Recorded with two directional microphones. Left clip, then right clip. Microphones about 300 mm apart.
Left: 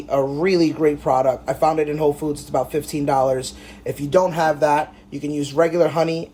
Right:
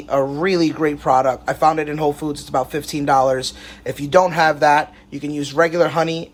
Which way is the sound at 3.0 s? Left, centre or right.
Right.